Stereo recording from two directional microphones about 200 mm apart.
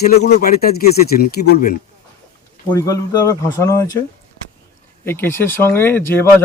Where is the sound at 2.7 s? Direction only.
15° left (ahead or behind).